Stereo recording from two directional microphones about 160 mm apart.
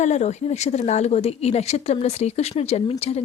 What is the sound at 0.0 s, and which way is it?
Speech, 45° left (ahead or behind).